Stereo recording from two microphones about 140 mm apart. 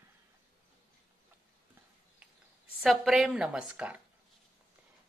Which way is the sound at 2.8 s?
Centre (ahead or behind).